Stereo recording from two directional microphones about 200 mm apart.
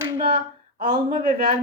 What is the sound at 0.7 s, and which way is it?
Speech, 35° right (ahead or behind).